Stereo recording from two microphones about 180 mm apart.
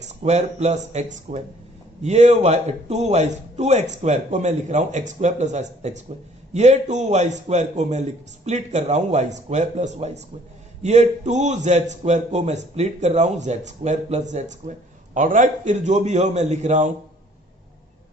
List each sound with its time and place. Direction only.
0.0 s a man's voice: 40° right (ahead or behind)